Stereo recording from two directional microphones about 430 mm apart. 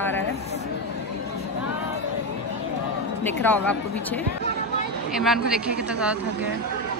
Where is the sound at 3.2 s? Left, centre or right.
Centre.